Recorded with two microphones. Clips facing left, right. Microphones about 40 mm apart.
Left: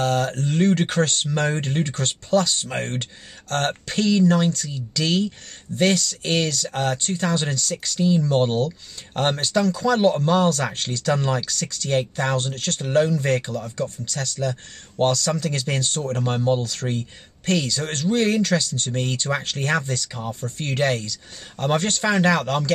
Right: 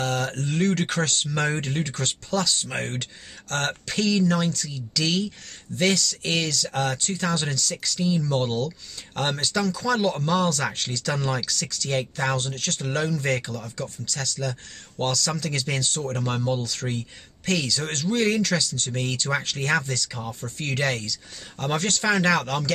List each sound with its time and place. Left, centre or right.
0.0 s speech: left
12.0 s speech: centre
12.4 s speech: left
18.9 s speech: centre